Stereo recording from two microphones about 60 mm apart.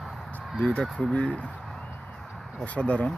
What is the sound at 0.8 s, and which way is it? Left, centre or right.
Speech, centre.